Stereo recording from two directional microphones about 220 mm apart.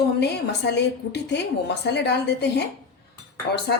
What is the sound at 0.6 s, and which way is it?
Speech, 50° left (ahead or behind).